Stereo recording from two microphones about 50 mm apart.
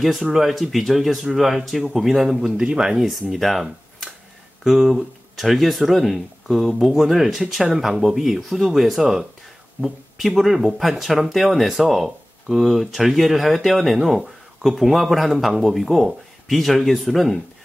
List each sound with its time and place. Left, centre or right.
0.3 s speech: centre
3.3 s speech: centre
4.6 s speech: centre